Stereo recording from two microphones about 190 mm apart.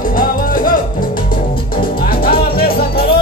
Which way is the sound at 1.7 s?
50° left (ahead or behind).